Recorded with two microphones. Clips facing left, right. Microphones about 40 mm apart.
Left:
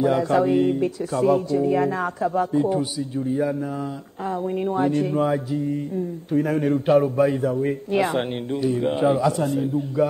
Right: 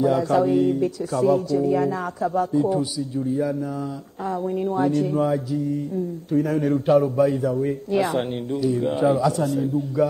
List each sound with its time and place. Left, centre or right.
0.0 s speech: left
4.2 s speech: left